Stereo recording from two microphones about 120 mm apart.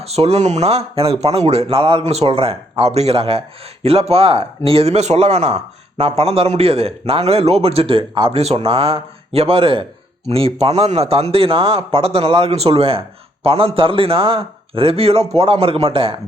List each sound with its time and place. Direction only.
0.0 s a man's voice: 60° right (ahead or behind)